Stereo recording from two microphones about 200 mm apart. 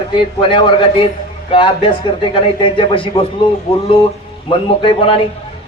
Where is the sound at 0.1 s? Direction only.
25° left (ahead or behind).